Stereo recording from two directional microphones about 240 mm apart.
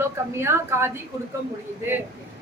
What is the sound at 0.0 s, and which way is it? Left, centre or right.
Speech, centre.